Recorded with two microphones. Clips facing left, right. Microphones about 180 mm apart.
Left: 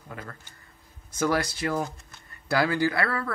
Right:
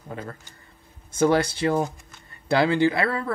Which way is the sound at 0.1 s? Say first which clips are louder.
Right 6 dB; 25° right (ahead or behind).